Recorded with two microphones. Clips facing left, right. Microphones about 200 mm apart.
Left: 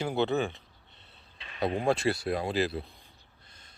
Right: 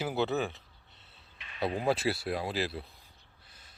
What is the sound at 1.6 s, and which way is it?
Speech, 25° left (ahead or behind).